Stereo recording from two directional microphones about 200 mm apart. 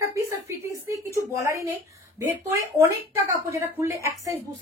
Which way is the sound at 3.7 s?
15° right (ahead or behind).